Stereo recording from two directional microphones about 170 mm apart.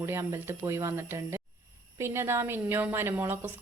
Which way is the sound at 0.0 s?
15° right (ahead or behind).